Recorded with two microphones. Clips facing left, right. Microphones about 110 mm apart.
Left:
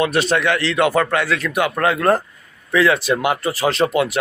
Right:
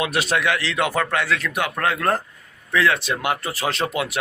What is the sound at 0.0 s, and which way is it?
A man's voice, 5° right (ahead or behind).